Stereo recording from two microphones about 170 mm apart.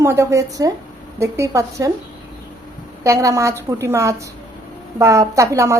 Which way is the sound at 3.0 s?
20° right (ahead or behind).